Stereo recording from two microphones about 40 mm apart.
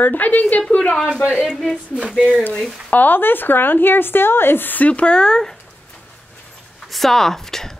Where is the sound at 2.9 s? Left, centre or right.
Left.